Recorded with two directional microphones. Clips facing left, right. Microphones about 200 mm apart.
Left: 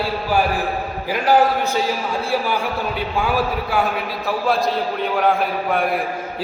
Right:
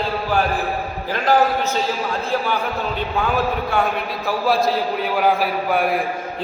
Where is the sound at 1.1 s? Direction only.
10° left (ahead or behind).